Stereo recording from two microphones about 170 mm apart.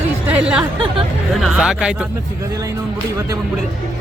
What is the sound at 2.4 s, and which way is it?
Speech, 20° right (ahead or behind).